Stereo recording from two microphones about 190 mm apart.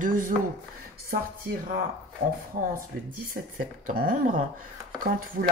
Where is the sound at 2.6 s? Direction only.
45° right (ahead or behind).